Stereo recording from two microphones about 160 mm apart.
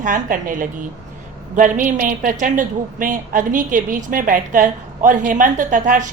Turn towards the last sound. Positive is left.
turn(degrees=-55)  # may be behind; listen again after turning